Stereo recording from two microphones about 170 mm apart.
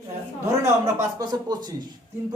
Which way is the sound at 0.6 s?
20° right (ahead or behind).